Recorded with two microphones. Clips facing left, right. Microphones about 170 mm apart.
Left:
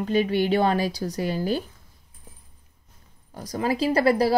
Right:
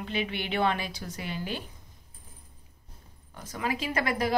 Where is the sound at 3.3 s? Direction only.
35° left (ahead or behind).